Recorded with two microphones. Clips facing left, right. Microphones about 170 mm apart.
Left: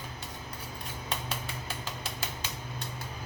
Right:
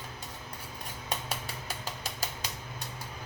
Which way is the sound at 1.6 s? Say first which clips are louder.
Even; 40° right (ahead or behind).